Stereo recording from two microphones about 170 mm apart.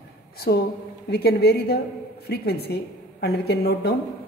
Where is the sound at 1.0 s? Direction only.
70° left (ahead or behind).